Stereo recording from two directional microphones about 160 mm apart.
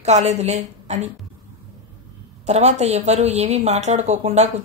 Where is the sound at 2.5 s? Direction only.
45° right (ahead or behind).